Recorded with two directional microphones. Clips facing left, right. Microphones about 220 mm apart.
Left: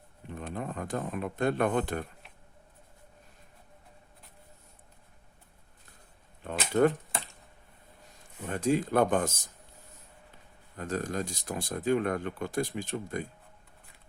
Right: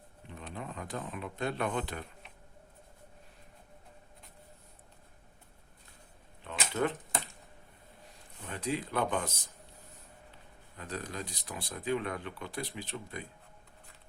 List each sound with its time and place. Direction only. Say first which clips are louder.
0.3 s speech: left 6 dB; 50° left (ahead or behind)
6.4 s a sound: left 8 dB; 45° left (ahead or behind)
8.4 s speech: left 8 dB; 45° left (ahead or behind)
10.8 s speech: left 7 dB; 45° left (ahead or behind)